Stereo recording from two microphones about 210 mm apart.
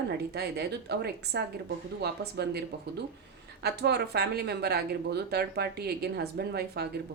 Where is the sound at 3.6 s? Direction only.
50° right (ahead or behind).